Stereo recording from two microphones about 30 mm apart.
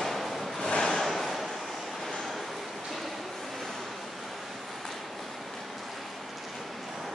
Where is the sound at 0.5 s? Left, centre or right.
Left.